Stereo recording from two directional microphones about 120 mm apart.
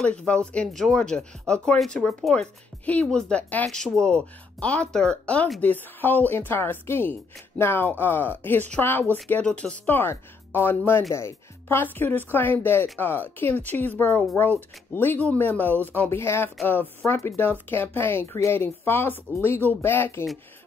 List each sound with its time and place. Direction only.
0.0 s a woman's voice: 10° left (ahead or behind)